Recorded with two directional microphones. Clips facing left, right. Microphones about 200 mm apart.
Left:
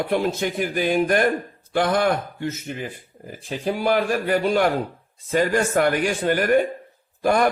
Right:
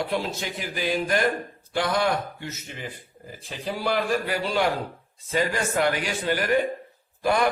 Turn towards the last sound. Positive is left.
turn(degrees=45)  # may be behind; listen again after turning